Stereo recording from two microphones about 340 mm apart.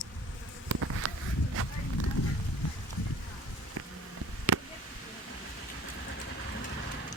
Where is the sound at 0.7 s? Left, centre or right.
Right.